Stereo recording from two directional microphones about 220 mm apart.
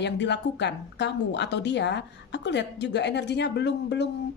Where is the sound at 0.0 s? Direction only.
50° left (ahead or behind).